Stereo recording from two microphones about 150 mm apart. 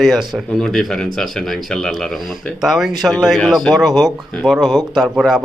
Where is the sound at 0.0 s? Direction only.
Centre (ahead or behind).